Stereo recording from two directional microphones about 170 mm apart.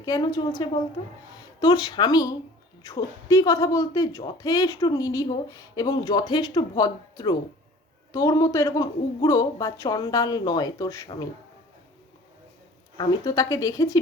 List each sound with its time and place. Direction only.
0.0 s speech: 20° left (ahead or behind)
13.0 s speech: 20° left (ahead or behind)